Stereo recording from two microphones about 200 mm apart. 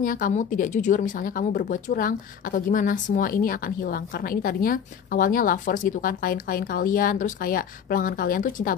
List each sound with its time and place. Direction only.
0.0 s a woman's voice: 45° left (ahead or behind)